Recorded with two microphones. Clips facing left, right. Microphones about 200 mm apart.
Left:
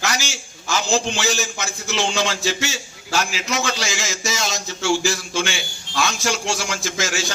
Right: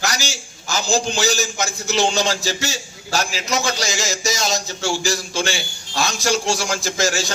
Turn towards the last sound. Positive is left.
turn(degrees=-40)  # may be behind; listen again after turning